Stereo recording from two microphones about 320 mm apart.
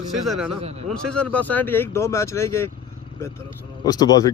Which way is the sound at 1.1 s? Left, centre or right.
Centre.